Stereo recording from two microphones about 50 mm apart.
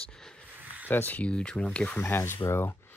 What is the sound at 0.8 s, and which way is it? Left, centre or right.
Speech, left.